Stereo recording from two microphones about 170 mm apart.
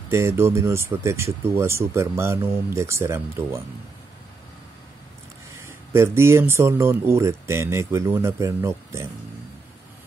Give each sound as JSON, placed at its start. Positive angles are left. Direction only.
{"t": 0.1, "sound": "speech", "side_deg": -15}
{"t": 5.6, "sound": "speech", "side_deg": -15}